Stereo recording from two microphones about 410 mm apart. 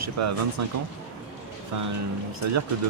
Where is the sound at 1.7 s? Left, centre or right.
Right.